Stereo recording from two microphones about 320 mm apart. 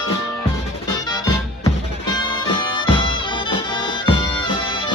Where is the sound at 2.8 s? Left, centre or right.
Centre.